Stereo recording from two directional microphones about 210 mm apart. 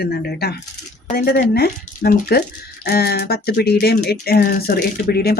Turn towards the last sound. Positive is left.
turn(degrees=45)  # may be behind; listen again after turning